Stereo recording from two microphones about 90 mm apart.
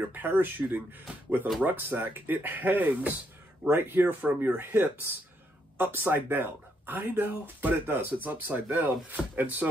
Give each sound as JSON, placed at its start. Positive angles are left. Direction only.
{"t": 0.0, "sound": "speech", "side_deg": -20}